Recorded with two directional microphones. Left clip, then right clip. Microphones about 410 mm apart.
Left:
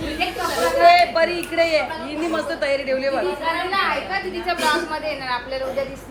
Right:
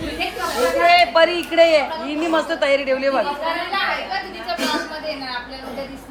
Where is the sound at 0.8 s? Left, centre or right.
Centre.